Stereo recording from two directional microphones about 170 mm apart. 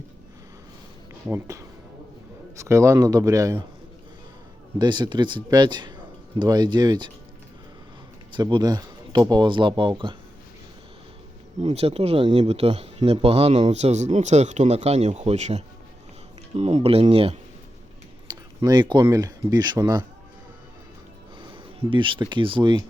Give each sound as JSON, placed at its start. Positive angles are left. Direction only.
{"t": 1.3, "sound": "a man's voice", "side_deg": -20}
{"t": 4.8, "sound": "a man's voice", "side_deg": -25}
{"t": 8.3, "sound": "speech", "side_deg": -30}
{"t": 11.6, "sound": "speech", "side_deg": -35}
{"t": 21.8, "sound": "a man's voice", "side_deg": -30}